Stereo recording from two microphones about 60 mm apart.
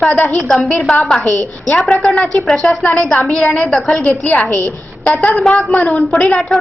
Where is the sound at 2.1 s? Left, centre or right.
Left.